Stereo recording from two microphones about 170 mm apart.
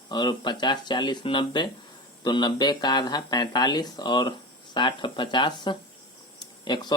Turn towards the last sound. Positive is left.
turn(degrees=25)  # may be behind; listen again after turning